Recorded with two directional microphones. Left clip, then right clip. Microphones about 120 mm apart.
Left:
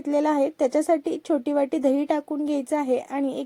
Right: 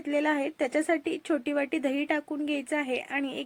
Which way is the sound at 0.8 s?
60° left (ahead or behind).